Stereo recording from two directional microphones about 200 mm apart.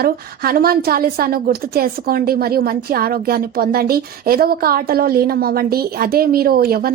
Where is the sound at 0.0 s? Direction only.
50° right (ahead or behind).